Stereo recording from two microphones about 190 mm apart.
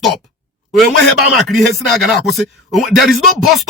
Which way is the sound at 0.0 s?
Centre (ahead or behind).